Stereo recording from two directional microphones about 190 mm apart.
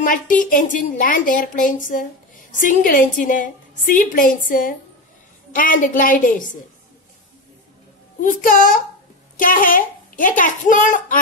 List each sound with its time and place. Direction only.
0.0 s a woman's voice: 45° left (ahead or behind)
8.2 s a woman's voice: 45° left (ahead or behind)